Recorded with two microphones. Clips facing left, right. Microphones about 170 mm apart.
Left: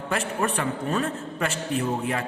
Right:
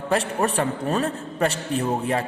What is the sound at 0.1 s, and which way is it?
A man's voice, 35° right (ahead or behind).